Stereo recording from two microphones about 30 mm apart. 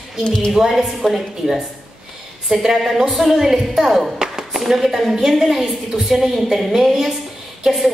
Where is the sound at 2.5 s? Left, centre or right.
Centre.